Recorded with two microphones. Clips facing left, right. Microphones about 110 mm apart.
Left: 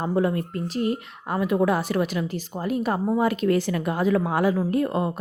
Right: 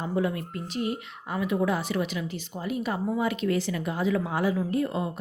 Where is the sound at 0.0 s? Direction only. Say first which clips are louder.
Left 5 dB; 45° left (ahead or behind).